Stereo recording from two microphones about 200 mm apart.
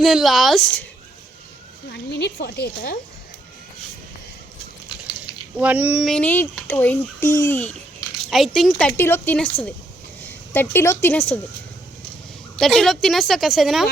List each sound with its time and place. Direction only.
0.0 s a woman's voice: centre (ahead or behind)
1.9 s speech: 55° left (ahead or behind)
5.5 s a woman's voice: 5° right (ahead or behind)
12.5 s a woman's voice: centre (ahead or behind)